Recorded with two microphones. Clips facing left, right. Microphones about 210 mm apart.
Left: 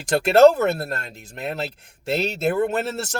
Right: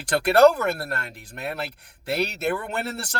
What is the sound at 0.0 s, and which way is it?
Speech, 20° left (ahead or behind).